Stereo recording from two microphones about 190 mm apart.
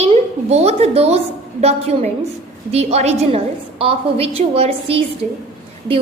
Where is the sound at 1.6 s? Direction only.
35° right (ahead or behind).